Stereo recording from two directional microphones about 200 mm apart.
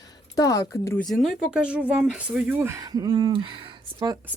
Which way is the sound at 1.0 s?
Centre (ahead or behind).